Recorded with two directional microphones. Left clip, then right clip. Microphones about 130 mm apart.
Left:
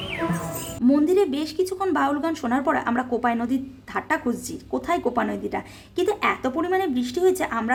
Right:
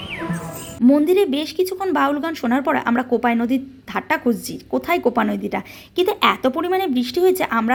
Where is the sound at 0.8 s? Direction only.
20° right (ahead or behind).